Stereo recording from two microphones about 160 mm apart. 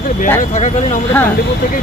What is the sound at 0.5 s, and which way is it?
Speech, 45° left (ahead or behind).